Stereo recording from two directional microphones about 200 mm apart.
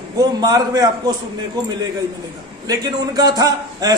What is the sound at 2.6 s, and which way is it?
A man's voice, 20° right (ahead or behind).